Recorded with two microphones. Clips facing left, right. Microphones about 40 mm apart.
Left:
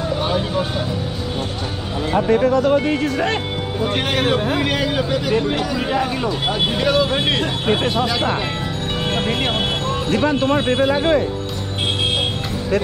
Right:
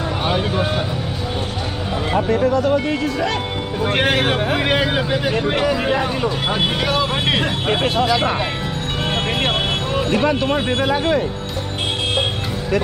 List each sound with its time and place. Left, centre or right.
0.2 s speech: centre
2.5 s speech: left
4.1 s speech: right
6.8 s speech: centre
9.5 s vehicle: centre